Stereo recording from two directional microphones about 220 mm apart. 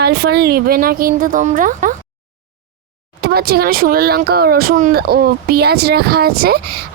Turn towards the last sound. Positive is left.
turn(degrees=-45)  # may be behind; listen again after turning